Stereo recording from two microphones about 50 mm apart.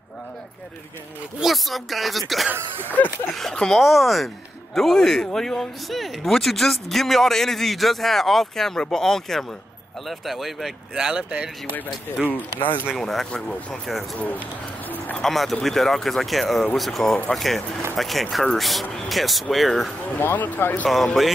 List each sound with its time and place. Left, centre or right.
1.4 s speech: centre
11.2 s speech: right
12.3 s speech: left
12.9 s speech: centre
15.2 s speech: centre
20.2 s speech: left
20.9 s speech: centre